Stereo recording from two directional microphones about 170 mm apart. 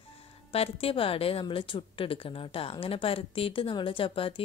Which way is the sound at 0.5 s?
35° left (ahead or behind).